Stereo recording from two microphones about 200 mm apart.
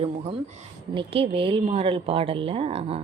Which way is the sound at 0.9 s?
30° right (ahead or behind).